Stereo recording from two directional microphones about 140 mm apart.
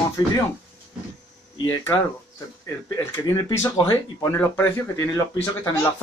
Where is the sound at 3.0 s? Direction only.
25° left (ahead or behind).